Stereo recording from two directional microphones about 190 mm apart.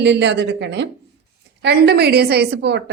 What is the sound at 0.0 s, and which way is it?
A woman's voice, 65° right (ahead or behind).